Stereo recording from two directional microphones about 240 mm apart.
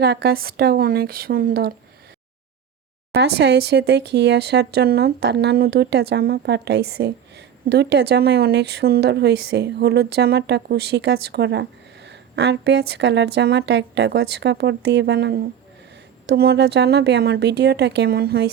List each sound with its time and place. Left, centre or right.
0.0 s speech: right
3.1 s speech: right